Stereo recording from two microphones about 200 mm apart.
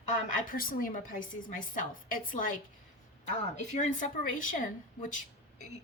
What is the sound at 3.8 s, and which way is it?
A woman's voice, 40° left (ahead or behind).